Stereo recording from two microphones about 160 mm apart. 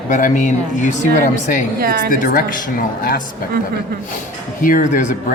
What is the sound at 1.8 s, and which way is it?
Speech, 70° right (ahead or behind).